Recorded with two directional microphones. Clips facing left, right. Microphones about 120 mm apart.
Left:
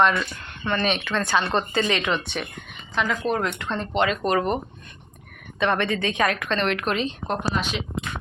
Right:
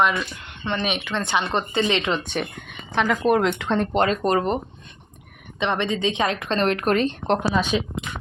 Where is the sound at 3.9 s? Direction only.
40° right (ahead or behind).